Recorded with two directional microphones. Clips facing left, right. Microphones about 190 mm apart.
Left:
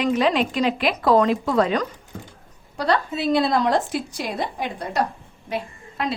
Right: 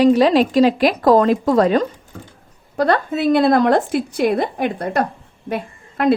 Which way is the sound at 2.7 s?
50° right (ahead or behind).